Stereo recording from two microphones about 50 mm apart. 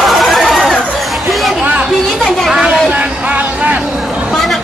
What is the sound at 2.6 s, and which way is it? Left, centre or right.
Vehicle, right.